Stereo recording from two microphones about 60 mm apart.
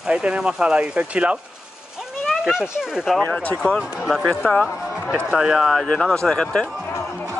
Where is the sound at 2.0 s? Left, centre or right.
Centre.